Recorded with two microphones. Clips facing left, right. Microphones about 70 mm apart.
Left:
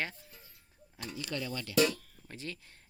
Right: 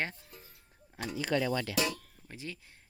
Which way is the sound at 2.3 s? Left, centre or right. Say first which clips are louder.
Even; centre.